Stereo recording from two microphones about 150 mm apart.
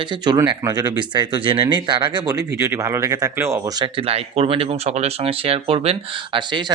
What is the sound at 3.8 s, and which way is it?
Speech, 40° right (ahead or behind).